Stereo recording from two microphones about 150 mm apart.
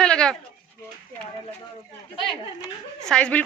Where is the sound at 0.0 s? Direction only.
5° left (ahead or behind).